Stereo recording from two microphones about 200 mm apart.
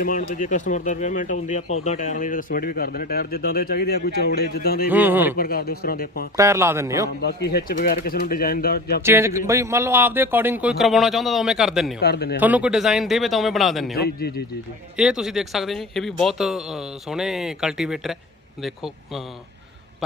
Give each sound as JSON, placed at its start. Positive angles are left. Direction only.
{"t": 0.3, "sound": "speech", "side_deg": 40}
{"t": 4.8, "sound": "a man's voice", "side_deg": -10}
{"t": 5.4, "sound": "speech", "side_deg": 50}
{"t": 6.3, "sound": "a man's voice", "side_deg": -15}
{"t": 7.2, "sound": "speech", "side_deg": 55}
{"t": 9.0, "sound": "a man's voice", "side_deg": -10}
{"t": 12.0, "sound": "speech", "side_deg": 55}
{"t": 12.4, "sound": "speech", "side_deg": -10}
{"t": 13.9, "sound": "speech", "side_deg": 50}
{"t": 15.0, "sound": "speech", "side_deg": -5}